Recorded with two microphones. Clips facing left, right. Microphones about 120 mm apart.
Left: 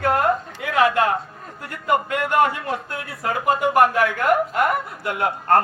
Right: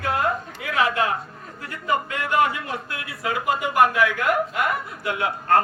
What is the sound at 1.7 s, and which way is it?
A man's voice, 55° left (ahead or behind).